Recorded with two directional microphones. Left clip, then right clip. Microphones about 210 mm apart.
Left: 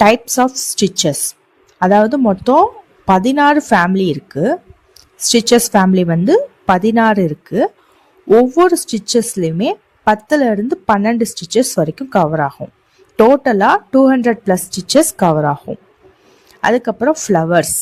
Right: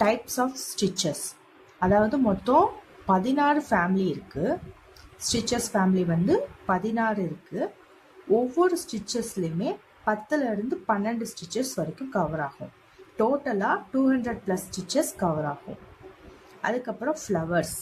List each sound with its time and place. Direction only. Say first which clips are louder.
0.0 s a woman's voice: left 13 dB; 40° left (ahead or behind)
16.6 s a woman's voice: left 15 dB; 45° left (ahead or behind)